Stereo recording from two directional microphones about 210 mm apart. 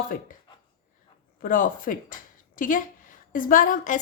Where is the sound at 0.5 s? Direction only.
20° left (ahead or behind).